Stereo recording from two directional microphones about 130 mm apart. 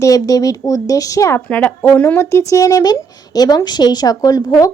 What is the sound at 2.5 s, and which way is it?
Speech, 25° left (ahead or behind).